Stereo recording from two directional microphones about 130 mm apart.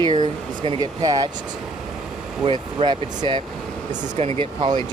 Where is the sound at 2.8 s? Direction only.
35° right (ahead or behind).